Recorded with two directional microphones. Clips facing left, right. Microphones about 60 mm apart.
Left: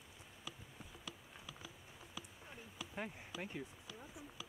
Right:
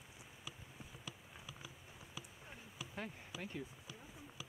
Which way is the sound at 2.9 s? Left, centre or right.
Centre.